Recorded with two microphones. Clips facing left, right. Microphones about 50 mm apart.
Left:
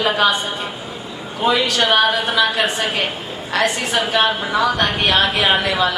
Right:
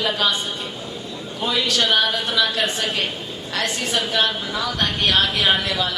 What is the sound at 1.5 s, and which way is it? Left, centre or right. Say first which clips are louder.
Speech: left 3 dB; centre.